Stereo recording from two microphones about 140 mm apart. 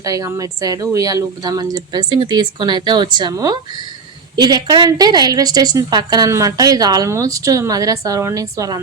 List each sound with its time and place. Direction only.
0.0 s a woman's voice: 25° right (ahead or behind)